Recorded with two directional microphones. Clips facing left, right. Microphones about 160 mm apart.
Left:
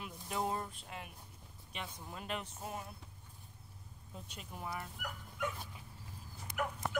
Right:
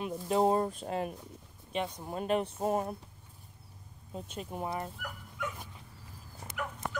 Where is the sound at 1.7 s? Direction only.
25° right (ahead or behind).